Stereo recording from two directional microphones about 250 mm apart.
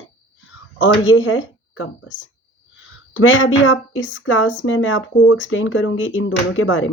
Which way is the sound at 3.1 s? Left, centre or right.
Left.